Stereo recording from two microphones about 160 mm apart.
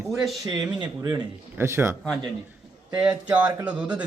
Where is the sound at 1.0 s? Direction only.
20° right (ahead or behind).